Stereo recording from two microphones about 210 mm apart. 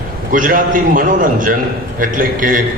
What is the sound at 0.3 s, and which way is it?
A man's voice, 40° right (ahead or behind).